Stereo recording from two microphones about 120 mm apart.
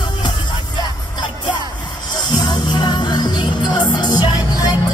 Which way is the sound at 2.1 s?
35° left (ahead or behind).